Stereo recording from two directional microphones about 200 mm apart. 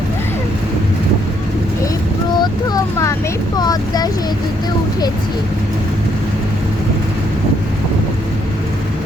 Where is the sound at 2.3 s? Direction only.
15° left (ahead or behind).